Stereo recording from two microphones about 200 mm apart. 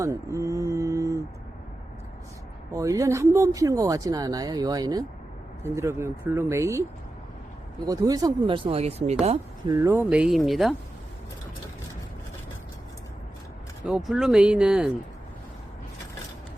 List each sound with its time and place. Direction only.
0.0 s mantra: 15° right (ahead or behind)
2.7 s speech: 15° right (ahead or behind)
7.9 s speech: 20° right (ahead or behind)
9.7 s speech: 15° right (ahead or behind)
13.8 s speech: centre (ahead or behind)